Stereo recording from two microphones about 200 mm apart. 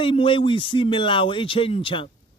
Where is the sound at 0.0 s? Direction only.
25° left (ahead or behind).